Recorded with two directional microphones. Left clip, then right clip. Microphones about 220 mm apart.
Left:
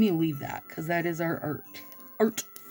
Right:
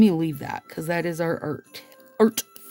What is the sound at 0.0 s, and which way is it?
Speech, 45° right (ahead or behind).